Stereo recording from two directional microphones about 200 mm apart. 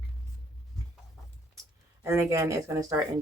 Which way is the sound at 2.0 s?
15° right (ahead or behind).